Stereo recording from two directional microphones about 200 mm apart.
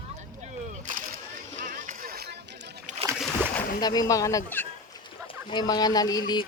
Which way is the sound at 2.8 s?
35° right (ahead or behind).